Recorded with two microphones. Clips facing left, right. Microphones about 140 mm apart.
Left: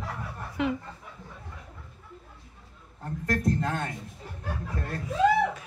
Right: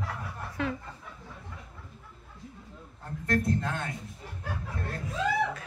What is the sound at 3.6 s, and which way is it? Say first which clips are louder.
Speech: left 3 dB; 45° left (ahead or behind).